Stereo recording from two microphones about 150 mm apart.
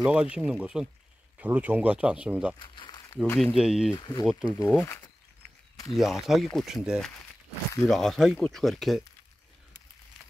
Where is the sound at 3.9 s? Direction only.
25° left (ahead or behind).